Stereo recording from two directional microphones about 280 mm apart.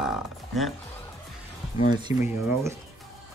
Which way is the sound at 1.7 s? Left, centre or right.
Left.